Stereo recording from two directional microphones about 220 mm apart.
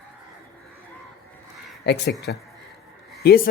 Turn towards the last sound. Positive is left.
turn(degrees=45)  # may be behind; listen again after turning